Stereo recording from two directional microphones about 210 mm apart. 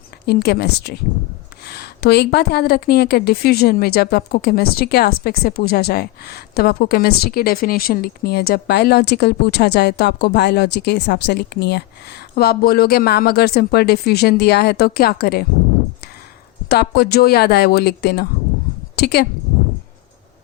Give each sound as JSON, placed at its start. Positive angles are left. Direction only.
{"t": 0.3, "sound": "a woman's voice", "side_deg": 50}
{"t": 16.6, "sound": "a woman's voice", "side_deg": 50}